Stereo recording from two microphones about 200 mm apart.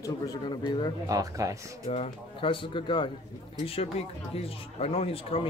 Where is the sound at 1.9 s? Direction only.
30° left (ahead or behind).